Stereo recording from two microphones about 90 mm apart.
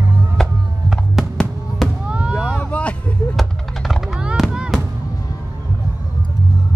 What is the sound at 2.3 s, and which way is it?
Vehicle, 5° left (ahead or behind).